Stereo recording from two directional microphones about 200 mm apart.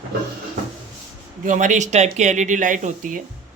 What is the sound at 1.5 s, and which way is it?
A woman's voice, 40° right (ahead or behind).